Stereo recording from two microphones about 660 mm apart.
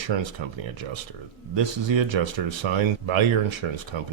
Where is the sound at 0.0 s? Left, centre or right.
Right.